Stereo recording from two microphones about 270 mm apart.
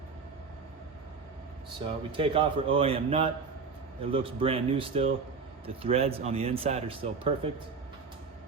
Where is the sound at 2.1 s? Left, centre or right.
Centre.